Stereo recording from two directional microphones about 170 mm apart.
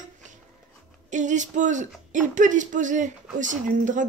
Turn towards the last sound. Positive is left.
turn(degrees=-50)  # may be behind; listen again after turning